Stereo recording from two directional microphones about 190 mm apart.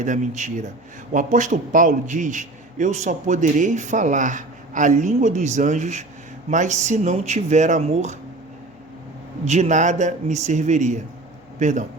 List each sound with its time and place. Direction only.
0.0 s a man's voice: 40° right (ahead or behind)
9.4 s a man's voice: 35° right (ahead or behind)